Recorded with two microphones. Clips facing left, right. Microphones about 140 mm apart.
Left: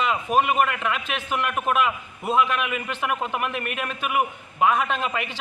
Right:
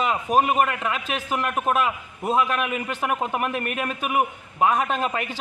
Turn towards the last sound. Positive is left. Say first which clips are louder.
# right 1 dB
turn(degrees=-40)  # may be behind; listen again after turning